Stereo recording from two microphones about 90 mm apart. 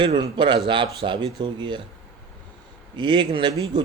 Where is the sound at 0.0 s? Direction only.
60° right (ahead or behind).